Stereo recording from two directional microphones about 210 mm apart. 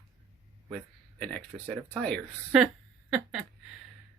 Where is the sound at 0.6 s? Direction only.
5° left (ahead or behind).